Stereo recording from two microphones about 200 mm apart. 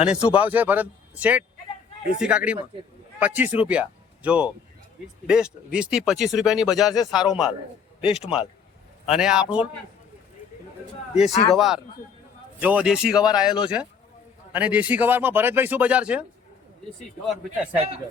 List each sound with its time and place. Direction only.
0.1 s speech: 5° right (ahead or behind)
6.9 s a man's voice: 20° left (ahead or behind)
7.2 s speech: 5° right (ahead or behind)
8.0 s a man's voice: 30° left (ahead or behind)
9.0 s speech: 5° right (ahead or behind)
11.3 s speech: 35° left (ahead or behind)
11.5 s speech: centre (ahead or behind)